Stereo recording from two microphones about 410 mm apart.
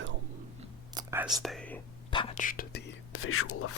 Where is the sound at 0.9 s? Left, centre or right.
Centre.